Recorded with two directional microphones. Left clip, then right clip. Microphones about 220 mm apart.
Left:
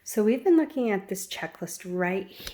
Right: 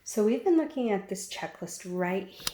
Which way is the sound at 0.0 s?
40° left (ahead or behind).